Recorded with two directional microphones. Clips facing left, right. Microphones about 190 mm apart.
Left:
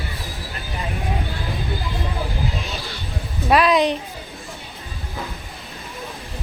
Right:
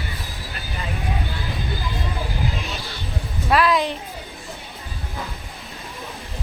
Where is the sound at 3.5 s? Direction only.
20° left (ahead or behind).